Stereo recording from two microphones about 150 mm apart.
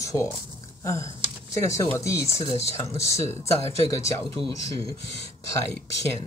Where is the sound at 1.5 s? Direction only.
20° left (ahead or behind).